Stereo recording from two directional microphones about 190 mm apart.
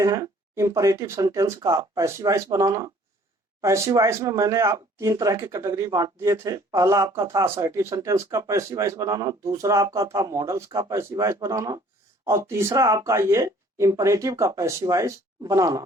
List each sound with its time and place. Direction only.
0.0 s speech: 15° right (ahead or behind)